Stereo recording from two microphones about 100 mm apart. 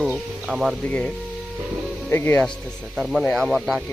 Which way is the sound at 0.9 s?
10° left (ahead or behind).